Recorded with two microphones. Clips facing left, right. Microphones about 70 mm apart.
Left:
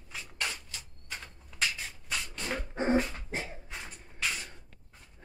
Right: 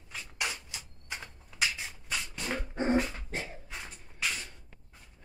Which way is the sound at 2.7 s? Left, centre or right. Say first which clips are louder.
Left 1 dB; centre.